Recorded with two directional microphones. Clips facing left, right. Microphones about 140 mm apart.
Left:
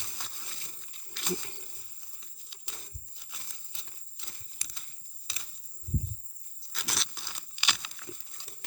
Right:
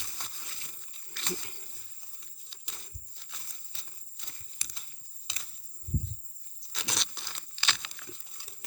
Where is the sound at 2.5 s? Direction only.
15° left (ahead or behind).